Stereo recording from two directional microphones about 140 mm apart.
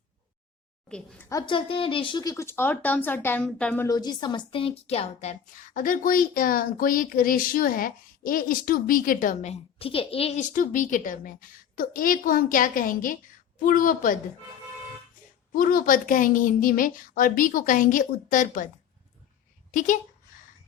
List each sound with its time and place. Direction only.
0.9 s a woman's voice: 5° left (ahead or behind)
1.3 s speech: 30° left (ahead or behind); by 3.8 s 10° left (ahead or behind)
3.8 s a woman's voice: 30° left (ahead or behind); by 10.4 s 45° left (ahead or behind)
10.5 s a woman's voice: 70° left (ahead or behind)
15.5 s a woman's voice: 80° left